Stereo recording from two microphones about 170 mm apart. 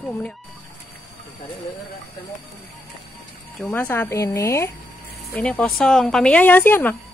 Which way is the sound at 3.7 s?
10° left (ahead or behind).